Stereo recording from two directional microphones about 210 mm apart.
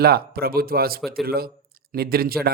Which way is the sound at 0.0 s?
45° right (ahead or behind).